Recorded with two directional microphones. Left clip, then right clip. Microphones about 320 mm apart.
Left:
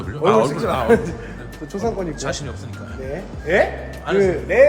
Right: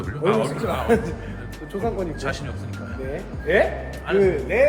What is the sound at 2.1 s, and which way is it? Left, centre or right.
Speech, centre.